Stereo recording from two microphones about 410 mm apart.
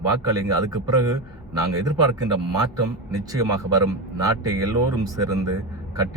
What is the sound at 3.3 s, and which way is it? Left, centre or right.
Speech, centre.